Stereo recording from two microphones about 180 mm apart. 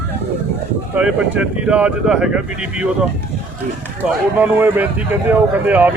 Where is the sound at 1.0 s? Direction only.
10° right (ahead or behind).